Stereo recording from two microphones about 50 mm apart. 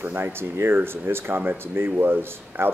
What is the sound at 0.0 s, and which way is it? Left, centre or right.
Speech, right.